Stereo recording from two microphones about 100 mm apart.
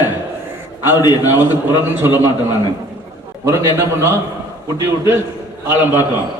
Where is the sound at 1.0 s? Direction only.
45° left (ahead or behind).